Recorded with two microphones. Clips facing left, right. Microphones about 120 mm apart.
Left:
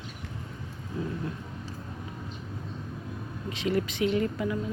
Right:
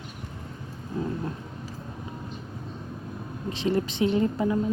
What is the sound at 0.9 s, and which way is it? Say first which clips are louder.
Vehicle: right 3 dB; 35° right (ahead or behind).